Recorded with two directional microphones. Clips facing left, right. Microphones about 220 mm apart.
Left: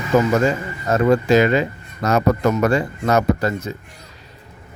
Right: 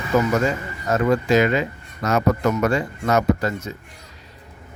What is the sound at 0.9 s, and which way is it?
Speech, 35° left (ahead or behind).